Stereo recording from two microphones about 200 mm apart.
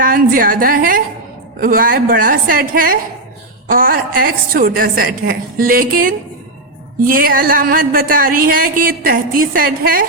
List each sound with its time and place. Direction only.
0.0 s a woman's voice: 45° right (ahead or behind)